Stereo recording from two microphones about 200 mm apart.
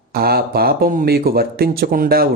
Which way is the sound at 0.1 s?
50° right (ahead or behind).